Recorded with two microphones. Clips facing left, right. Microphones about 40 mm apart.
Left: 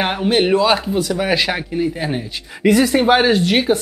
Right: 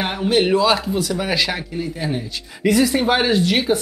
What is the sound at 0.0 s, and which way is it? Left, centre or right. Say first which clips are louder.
Speech: left 2 dB; left.